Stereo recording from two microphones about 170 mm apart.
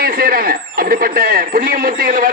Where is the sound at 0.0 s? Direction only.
55° right (ahead or behind).